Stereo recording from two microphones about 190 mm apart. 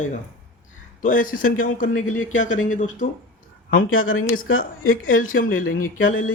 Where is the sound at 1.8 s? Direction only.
90° left.